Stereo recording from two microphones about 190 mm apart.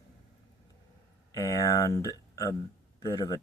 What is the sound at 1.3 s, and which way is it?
Speech, 15° left (ahead or behind).